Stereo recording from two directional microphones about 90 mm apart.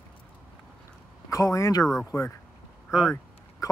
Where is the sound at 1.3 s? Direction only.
40° left (ahead or behind).